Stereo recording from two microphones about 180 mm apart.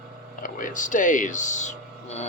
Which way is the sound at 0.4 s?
45° left (ahead or behind).